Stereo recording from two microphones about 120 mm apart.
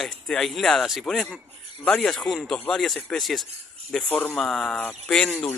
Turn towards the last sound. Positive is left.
turn(degrees=10)  # may be behind; listen again after turning